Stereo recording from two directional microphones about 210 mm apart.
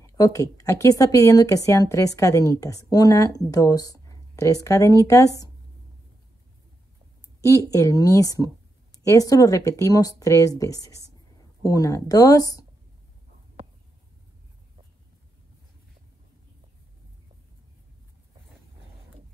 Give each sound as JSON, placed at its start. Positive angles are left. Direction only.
{"t": 0.0, "sound": "speech", "side_deg": 15}
{"t": 7.4, "sound": "speech", "side_deg": 15}